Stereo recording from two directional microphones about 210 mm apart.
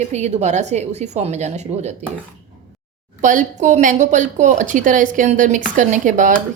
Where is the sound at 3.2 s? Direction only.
35° right (ahead or behind).